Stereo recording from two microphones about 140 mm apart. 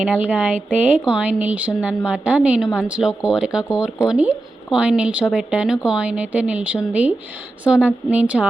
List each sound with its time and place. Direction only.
0.0 s speech: 10° right (ahead or behind)